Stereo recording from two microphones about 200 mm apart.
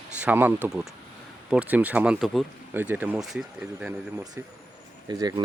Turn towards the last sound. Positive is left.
turn(degrees=-20)  # may be behind; listen again after turning